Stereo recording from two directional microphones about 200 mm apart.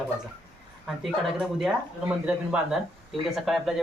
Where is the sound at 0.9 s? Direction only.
Centre (ahead or behind).